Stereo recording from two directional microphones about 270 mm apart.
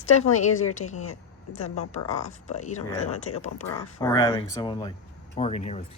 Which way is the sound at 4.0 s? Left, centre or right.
Centre.